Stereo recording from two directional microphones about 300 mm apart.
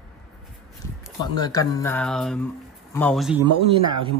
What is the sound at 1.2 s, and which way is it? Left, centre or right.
A man's voice, centre.